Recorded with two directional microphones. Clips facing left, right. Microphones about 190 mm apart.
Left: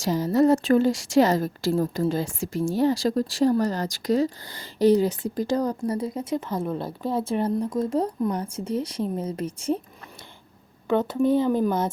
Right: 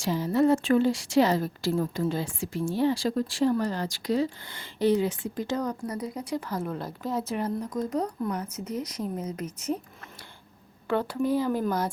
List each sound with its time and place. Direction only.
0.0 s speech: 40° left (ahead or behind)
10.8 s speech: 20° left (ahead or behind)